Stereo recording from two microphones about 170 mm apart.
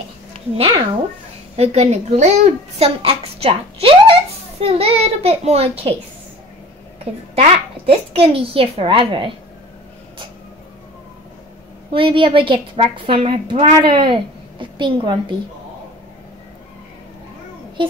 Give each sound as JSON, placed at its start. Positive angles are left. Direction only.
{"t": 0.6, "sound": "a child's voice", "side_deg": -30}
{"t": 7.3, "sound": "a child's voice", "side_deg": -35}
{"t": 11.9, "sound": "speech", "side_deg": -30}
{"t": 17.8, "sound": "a child's voice", "side_deg": -30}